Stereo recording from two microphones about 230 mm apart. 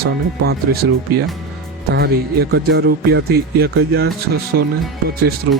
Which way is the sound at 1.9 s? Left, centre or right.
Right.